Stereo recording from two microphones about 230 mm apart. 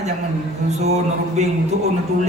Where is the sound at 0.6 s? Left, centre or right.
Right.